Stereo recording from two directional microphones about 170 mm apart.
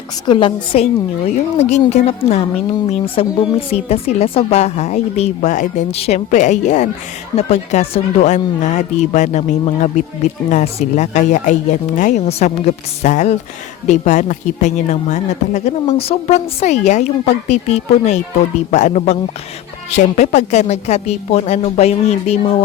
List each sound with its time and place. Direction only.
0.3 s a woman's voice: 30° left (ahead or behind)